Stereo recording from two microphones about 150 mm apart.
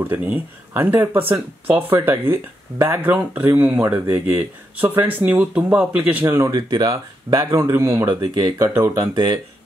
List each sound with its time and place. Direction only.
0.0 s speech: 15° right (ahead or behind)
8.6 s speech: 15° right (ahead or behind)